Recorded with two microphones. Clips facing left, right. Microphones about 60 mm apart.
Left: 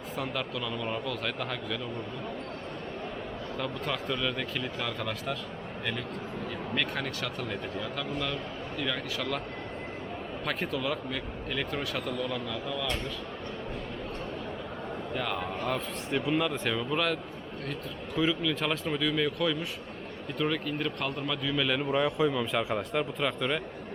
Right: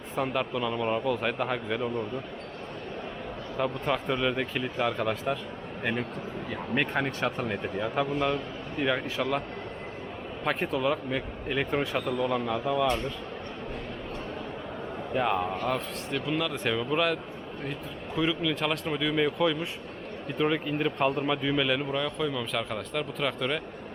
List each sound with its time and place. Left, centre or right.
0.2 s speech: right
3.6 s speech: centre
10.4 s speech: centre
15.1 s speech: right; by 16.6 s centre
16.6 s speech: centre; by 21.6 s right
21.6 s speech: centre
21.8 s speech: centre
23.2 s speech: centre